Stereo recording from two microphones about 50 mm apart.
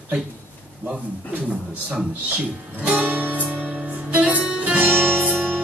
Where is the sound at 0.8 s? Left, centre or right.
Right.